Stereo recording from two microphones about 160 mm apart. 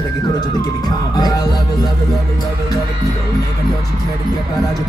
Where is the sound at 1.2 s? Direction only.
25° left (ahead or behind).